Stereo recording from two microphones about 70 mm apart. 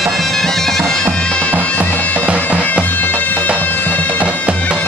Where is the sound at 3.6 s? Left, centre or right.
Left.